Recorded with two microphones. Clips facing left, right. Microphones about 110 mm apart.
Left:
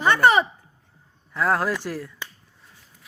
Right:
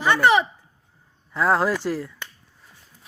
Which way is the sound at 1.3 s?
5° right (ahead or behind).